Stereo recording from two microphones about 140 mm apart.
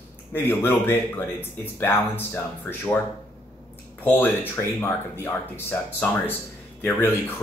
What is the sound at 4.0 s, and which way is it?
Speech, 15° left (ahead or behind).